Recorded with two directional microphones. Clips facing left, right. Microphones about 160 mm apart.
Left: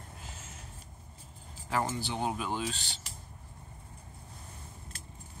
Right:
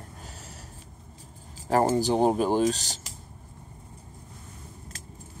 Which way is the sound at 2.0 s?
40° right (ahead or behind).